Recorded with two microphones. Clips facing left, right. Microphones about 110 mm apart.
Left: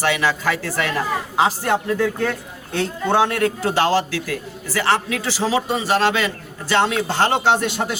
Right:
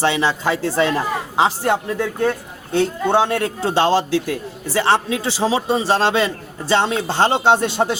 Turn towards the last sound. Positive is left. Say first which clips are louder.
# right 3 dB
turn(degrees=-30)  # may be behind; listen again after turning